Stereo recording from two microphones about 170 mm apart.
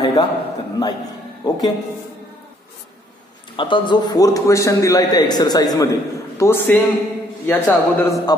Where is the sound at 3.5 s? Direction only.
30° left (ahead or behind); by 7.7 s 10° left (ahead or behind).